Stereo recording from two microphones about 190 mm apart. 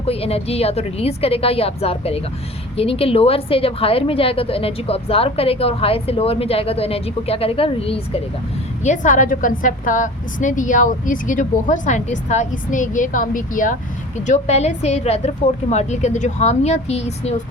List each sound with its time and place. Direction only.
0.0 s a woman's voice: 30° left (ahead or behind)